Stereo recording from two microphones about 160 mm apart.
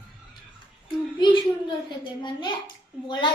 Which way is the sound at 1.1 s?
30° left (ahead or behind).